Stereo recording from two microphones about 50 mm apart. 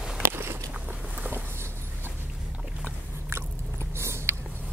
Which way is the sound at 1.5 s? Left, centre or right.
Right.